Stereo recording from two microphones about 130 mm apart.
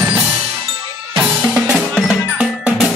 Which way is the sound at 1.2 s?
15° right (ahead or behind).